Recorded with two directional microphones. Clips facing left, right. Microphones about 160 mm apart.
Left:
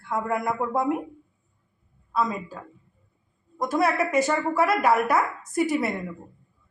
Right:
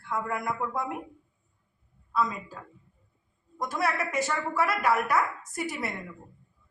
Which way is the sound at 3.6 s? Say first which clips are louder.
Left 6 dB; 25° left (ahead or behind).